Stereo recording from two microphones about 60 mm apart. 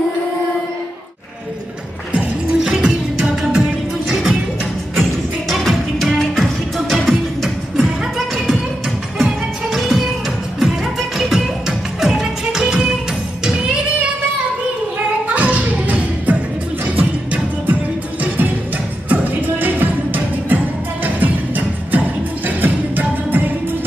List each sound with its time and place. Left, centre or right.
2.1 s music: centre
5.5 s music: centre
15.3 s music: right
19.0 s music: right